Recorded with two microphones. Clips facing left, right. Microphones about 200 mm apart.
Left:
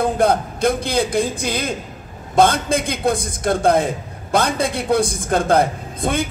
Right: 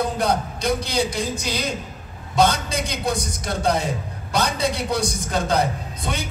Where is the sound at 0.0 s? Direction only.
50° left (ahead or behind).